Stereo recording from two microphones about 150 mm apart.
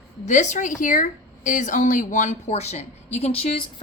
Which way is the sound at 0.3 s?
55° left (ahead or behind).